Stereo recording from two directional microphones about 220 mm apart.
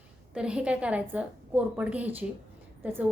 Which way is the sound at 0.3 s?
5° right (ahead or behind).